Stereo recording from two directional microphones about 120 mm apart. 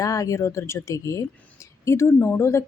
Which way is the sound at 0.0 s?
30° left (ahead or behind).